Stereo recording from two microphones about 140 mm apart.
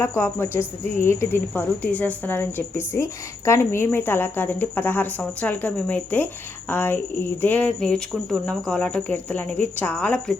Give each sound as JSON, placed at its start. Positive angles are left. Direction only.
{"t": 0.0, "sound": "a woman's voice", "side_deg": 15}